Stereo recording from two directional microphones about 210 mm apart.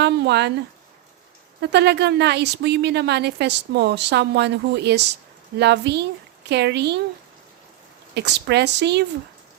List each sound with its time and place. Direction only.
0.0 s a sound: 55° right (ahead or behind)
1.6 s speech: 55° right (ahead or behind)
8.1 s speech: 55° right (ahead or behind)